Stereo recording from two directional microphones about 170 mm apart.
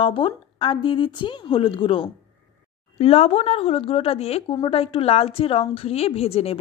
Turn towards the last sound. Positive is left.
turn(degrees=35)  # may be behind; listen again after turning